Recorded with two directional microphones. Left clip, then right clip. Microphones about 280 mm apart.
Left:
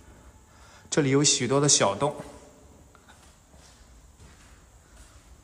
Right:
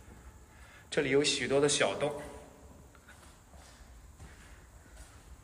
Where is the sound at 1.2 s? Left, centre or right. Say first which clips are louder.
Left 5 dB; centre.